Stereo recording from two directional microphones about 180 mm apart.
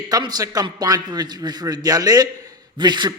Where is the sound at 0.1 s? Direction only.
20° right (ahead or behind).